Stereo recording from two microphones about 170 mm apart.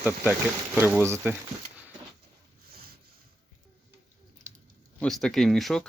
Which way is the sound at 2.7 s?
65° right (ahead or behind).